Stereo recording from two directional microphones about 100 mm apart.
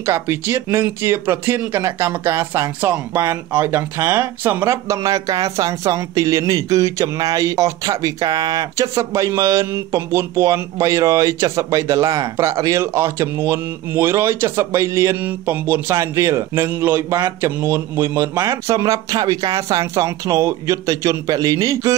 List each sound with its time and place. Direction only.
0.0 s speech: 25° right (ahead or behind)
15.1 s speech: 20° right (ahead or behind); by 21.9 s 35° right (ahead or behind)